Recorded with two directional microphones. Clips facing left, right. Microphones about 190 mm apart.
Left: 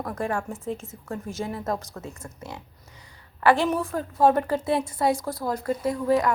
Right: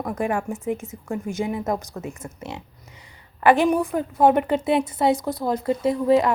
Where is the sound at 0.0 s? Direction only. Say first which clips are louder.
Right 4 dB; 15° right (ahead or behind).